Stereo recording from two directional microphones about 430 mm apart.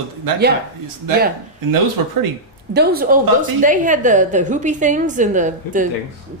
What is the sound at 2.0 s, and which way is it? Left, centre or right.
Speech, right.